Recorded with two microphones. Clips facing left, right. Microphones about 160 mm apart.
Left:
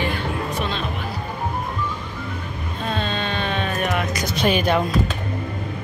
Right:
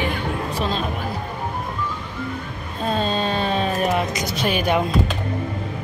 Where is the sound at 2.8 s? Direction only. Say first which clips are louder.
Right 4 dB; 40° right (ahead or behind).